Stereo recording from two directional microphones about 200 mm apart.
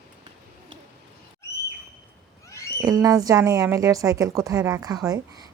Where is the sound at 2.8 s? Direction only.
15° right (ahead or behind).